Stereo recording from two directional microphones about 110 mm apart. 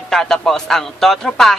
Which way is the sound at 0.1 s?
5° left (ahead or behind).